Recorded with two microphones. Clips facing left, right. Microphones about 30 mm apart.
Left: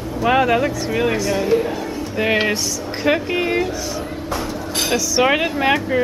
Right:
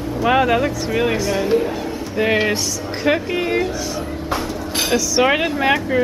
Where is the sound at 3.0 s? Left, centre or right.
Centre.